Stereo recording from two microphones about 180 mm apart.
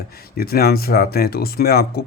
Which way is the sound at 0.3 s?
60° left (ahead or behind).